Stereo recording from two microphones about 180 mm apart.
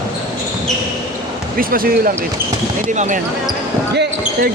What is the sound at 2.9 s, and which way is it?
Speech, 40° right (ahead or behind).